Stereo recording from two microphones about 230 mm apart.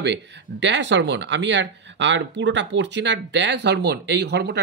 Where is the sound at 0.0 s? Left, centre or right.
Right.